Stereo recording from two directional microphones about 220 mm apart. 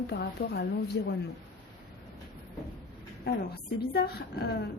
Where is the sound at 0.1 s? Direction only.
50° left (ahead or behind).